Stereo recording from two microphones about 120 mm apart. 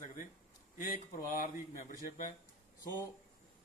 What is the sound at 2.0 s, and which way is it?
Speech, 90° left.